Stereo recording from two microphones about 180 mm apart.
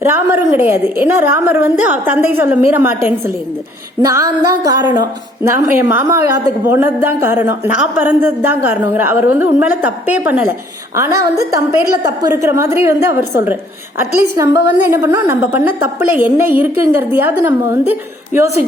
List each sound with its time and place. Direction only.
0.0 s a woman's voice: 10° right (ahead or behind)